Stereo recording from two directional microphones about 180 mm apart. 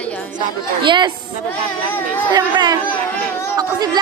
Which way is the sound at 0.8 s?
25° right (ahead or behind).